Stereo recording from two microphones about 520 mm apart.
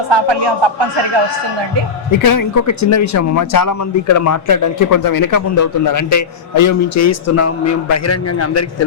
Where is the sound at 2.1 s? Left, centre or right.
Left.